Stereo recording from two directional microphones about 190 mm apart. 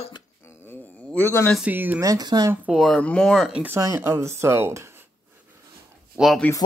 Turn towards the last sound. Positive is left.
turn(degrees=0)  # may be behind; listen again after turning